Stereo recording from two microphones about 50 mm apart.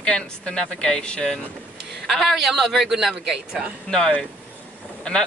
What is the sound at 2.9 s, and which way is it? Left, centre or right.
Female singing, centre.